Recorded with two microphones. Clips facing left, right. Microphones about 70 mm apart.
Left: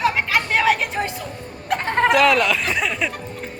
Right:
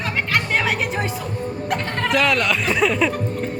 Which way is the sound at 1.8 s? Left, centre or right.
Left.